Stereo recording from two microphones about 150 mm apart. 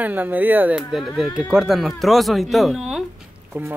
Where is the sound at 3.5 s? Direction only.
15° right (ahead or behind).